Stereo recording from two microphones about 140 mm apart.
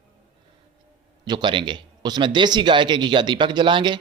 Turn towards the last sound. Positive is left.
turn(degrees=-35)  # may be behind; listen again after turning